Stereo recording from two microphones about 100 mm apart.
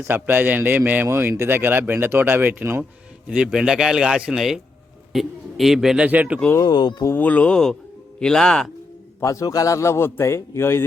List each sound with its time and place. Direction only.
0.0 s speech: 20° right (ahead or behind)
3.2 s a man's voice: 10° right (ahead or behind)
6.6 s speech: 45° left (ahead or behind)
7.0 s speech: 20° left (ahead or behind)
9.2 s a man's voice: 35° left (ahead or behind)